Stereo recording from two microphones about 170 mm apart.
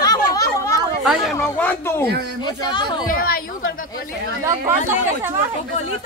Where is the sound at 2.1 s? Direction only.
80° right.